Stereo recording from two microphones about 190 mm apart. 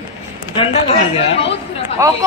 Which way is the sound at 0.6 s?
30° left (ahead or behind).